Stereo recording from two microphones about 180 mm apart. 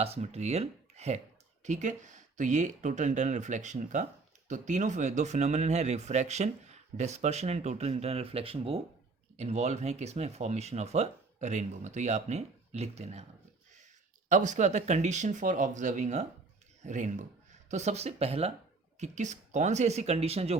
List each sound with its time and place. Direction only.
0.0 s speech: 35° right (ahead or behind)
14.3 s speech: 45° right (ahead or behind)